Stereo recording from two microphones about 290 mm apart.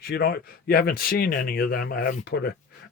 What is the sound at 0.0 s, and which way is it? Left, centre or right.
Speech, left.